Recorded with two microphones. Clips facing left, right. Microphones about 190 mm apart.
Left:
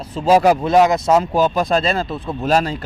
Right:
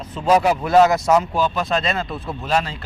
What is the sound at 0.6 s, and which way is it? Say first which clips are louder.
Speech: left 1 dB; 15° left (ahead or behind).